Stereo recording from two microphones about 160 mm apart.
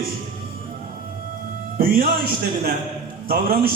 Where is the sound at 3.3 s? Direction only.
70° right (ahead or behind).